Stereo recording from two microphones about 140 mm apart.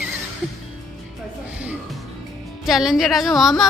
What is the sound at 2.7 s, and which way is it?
A woman's voice, centre (ahead or behind).